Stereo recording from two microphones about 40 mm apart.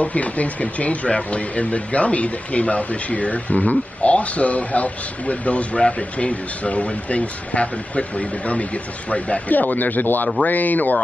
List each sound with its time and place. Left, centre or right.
0.0 s speech: left
9.5 s speech: left